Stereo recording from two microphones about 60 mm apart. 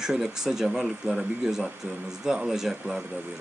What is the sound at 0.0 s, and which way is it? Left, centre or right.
Speech, centre.